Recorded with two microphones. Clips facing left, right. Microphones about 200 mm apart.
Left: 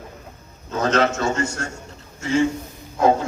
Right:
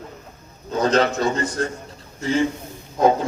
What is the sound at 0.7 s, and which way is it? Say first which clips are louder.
A man's voice: right 1 dB; 35° right (ahead or behind).